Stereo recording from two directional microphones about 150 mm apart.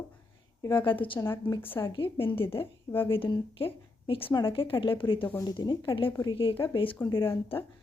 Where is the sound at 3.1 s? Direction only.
35° left (ahead or behind).